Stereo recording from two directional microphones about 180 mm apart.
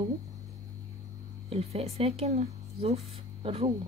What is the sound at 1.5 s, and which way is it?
A woman's voice, 35° right (ahead or behind).